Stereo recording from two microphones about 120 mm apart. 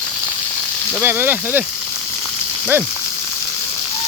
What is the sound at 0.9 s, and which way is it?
Speech, 15° right (ahead or behind).